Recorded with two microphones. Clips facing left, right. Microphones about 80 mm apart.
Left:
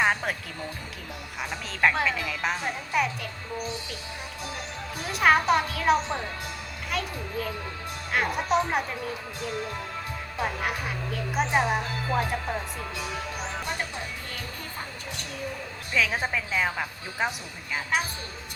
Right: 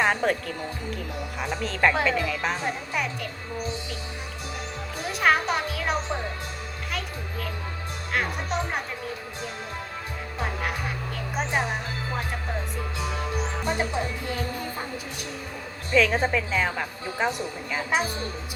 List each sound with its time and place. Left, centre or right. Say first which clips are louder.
0.0 s speech: right 3 dB; centre
1.4 s speech: right 2 dB; centre
5.0 s a child's voice: left 2 dB; centre
10.4 s speech: left 1 dB; centre
13.7 s music: right 6 dB; right
15.9 s speech: right 5 dB; centre